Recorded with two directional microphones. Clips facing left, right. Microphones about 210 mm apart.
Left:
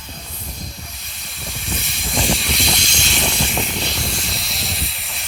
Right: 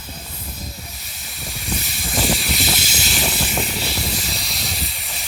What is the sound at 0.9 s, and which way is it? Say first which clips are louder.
Hiss: even; centre (ahead or behind).